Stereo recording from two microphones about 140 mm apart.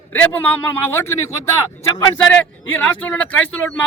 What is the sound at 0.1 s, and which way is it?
Speech, 10° left (ahead or behind).